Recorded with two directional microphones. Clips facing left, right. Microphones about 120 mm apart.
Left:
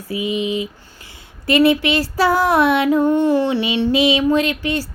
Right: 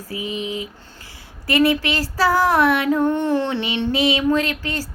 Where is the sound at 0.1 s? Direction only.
15° left (ahead or behind).